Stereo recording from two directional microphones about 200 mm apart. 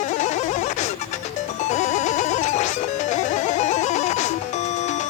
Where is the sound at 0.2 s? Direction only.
35° left (ahead or behind).